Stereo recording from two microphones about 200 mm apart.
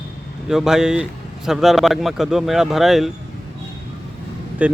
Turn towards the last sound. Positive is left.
turn(degrees=-5)  # may be behind; listen again after turning